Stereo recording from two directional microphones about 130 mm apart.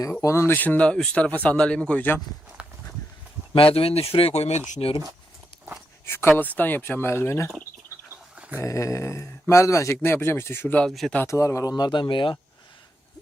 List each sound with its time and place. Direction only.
0.0 s speech: 25° left (ahead or behind)
2.6 s walk: 10° right (ahead or behind)
3.5 s speech: 45° left (ahead or behind)
6.1 s speech: 15° left (ahead or behind)
8.1 s a sound: 10° right (ahead or behind)
8.5 s speech: 25° left (ahead or behind); by 11.2 s 5° left (ahead or behind)
11.2 s speech: 25° left (ahead or behind)
11.8 s speech: 35° left (ahead or behind)